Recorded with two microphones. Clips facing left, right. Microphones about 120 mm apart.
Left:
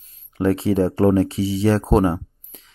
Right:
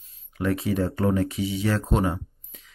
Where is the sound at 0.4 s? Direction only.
30° left (ahead or behind).